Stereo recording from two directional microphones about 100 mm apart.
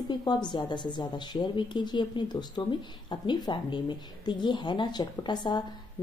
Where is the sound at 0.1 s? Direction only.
45° left (ahead or behind).